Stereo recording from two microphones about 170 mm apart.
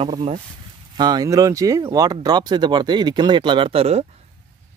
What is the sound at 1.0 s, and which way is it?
Speech, 25° right (ahead or behind).